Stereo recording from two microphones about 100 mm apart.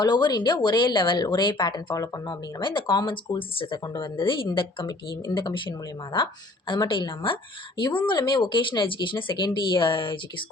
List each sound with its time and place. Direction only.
0.0 s speech: 45° left (ahead or behind)
3.8 s speech: 45° left (ahead or behind)